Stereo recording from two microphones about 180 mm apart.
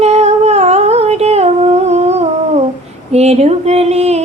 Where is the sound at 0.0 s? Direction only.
35° right (ahead or behind).